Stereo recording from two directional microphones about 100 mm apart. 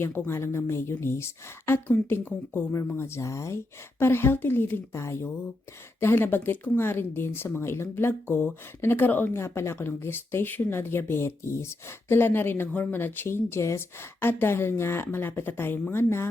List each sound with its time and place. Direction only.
0.0 s speech: 20° left (ahead or behind)